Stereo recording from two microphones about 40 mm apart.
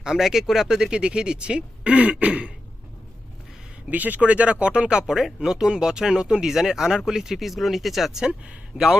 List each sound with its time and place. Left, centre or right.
0.0 s speech: centre; by 2.5 s right
3.8 s speech: right
4.2 s speech: right
5.0 s speech: centre
8.7 s speech: centre